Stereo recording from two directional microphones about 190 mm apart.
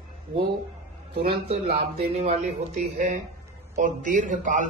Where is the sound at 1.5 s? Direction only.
30° right (ahead or behind).